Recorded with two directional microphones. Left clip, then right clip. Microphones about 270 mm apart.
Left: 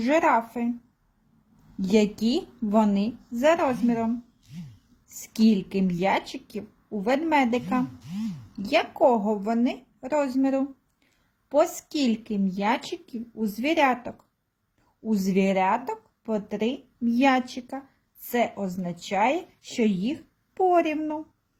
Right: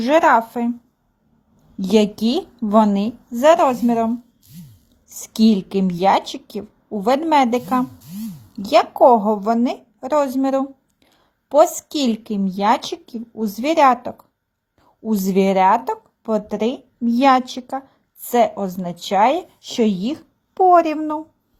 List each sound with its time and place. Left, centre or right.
0.0 s speech: centre
1.8 s speech: centre